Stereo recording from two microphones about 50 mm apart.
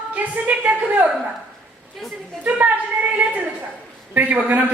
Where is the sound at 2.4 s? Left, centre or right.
Right.